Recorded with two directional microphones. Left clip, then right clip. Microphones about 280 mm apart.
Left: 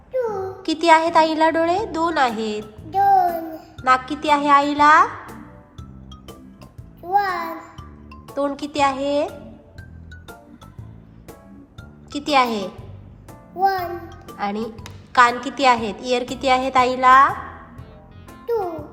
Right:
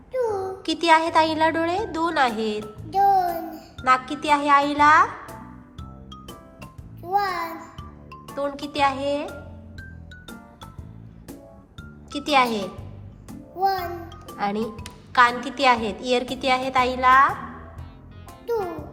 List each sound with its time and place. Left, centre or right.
0.1 s a child's voice: centre
7.0 s music: centre
8.4 s a woman's voice: centre
12.1 s a woman's voice: centre